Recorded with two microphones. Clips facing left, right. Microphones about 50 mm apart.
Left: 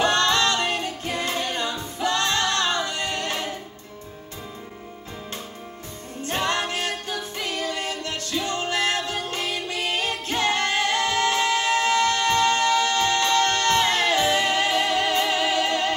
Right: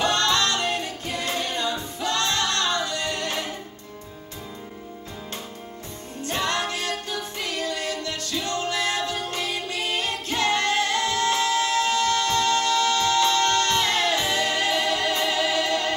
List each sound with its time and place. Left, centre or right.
0.0 s music: left
6.2 s music: left